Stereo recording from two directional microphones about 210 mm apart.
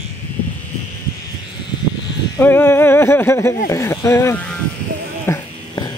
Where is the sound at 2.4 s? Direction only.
10° left (ahead or behind).